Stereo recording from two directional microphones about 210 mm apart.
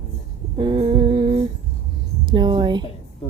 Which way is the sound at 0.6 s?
25° right (ahead or behind).